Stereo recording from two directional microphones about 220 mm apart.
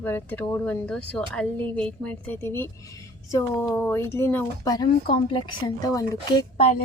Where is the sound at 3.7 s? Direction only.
5° left (ahead or behind); by 6.7 s 25° left (ahead or behind).